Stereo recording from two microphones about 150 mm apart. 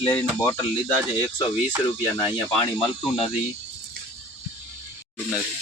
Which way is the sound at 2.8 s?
40° left (ahead or behind).